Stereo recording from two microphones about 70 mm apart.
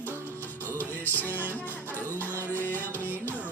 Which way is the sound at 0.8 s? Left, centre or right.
Left.